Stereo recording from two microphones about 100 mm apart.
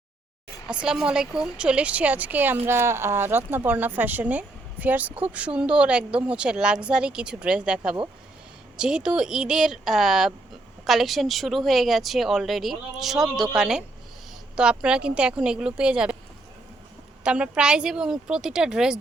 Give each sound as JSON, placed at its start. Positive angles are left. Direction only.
{"t": 0.7, "sound": "speech", "side_deg": -10}
{"t": 17.2, "sound": "speech", "side_deg": -10}